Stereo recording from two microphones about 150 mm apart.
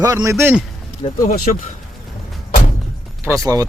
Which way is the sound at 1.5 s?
55° left (ahead or behind).